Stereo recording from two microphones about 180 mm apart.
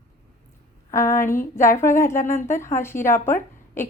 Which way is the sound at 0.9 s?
15° left (ahead or behind).